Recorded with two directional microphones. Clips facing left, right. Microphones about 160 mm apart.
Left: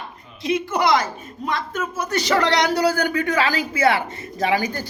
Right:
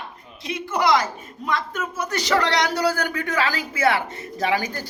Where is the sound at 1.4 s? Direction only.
25° left (ahead or behind).